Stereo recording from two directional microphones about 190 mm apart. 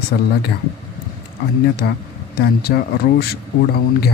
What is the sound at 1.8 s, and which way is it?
Speech, 60° left (ahead or behind).